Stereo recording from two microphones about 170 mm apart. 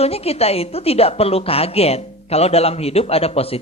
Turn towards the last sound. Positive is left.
turn(degrees=35)  # may be behind; listen again after turning